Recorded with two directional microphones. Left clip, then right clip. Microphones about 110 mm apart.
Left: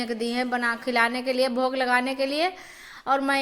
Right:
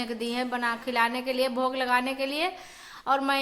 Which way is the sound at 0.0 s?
30° left (ahead or behind).